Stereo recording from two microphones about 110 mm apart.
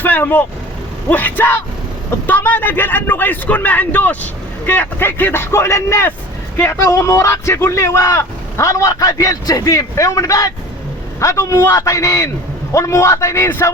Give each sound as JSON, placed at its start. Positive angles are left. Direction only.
{"t": 0.0, "sound": "a man's voice", "side_deg": 15}